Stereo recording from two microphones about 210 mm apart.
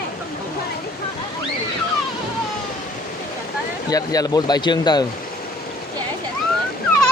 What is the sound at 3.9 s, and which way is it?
Speech, 15° left (ahead or behind).